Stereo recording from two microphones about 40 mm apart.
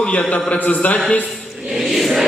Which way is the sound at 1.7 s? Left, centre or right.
Centre.